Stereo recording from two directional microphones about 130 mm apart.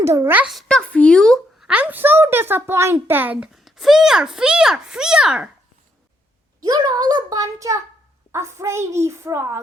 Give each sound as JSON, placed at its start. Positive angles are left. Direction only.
{"t": 0.0, "sound": "a child's voice", "side_deg": -20}
{"t": 0.4, "sound": "a child's voice", "side_deg": 0}
{"t": 1.6, "sound": "a child's voice", "side_deg": -10}
{"t": 3.5, "sound": "a child's voice", "side_deg": 0}
{"t": 6.6, "sound": "a child's voice", "side_deg": -30}